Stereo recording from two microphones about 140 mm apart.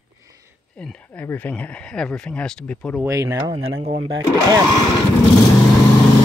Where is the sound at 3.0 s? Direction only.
25° right (ahead or behind).